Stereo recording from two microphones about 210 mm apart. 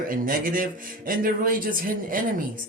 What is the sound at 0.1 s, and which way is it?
Speech, 40° right (ahead or behind).